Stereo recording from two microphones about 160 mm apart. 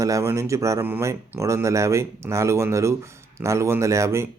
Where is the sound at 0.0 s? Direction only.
20° right (ahead or behind).